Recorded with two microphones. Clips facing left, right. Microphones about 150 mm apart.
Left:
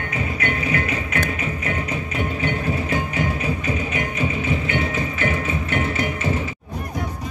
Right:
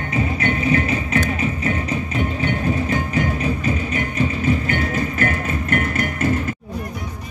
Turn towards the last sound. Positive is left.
turn(degrees=-50)  # may be behind; listen again after turning